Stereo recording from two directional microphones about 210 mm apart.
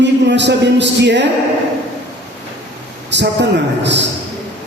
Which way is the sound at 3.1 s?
55° right (ahead or behind).